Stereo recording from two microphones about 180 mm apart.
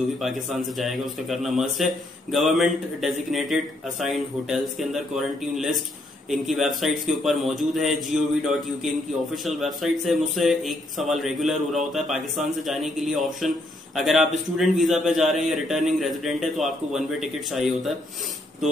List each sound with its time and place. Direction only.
0.2 s a man's voice: centre (ahead or behind)